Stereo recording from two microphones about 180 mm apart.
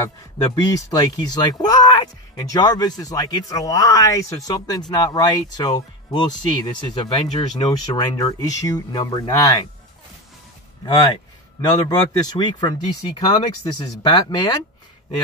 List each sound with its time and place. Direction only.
0.6 s speech: 20° left (ahead or behind)
11.6 s speech: 20° left (ahead or behind)